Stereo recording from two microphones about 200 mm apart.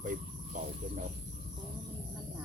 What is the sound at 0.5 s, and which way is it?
Speech, 40° right (ahead or behind).